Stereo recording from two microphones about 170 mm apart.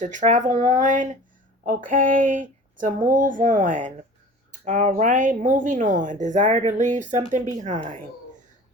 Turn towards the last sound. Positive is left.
turn(degrees=-45)  # may be behind; listen again after turning